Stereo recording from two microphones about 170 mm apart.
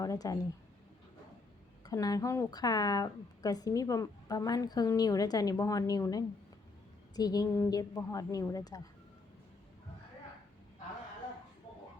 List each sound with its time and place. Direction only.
0.0 s a woman's voice: 20° left (ahead or behind)
1.8 s a woman's voice: 20° left (ahead or behind)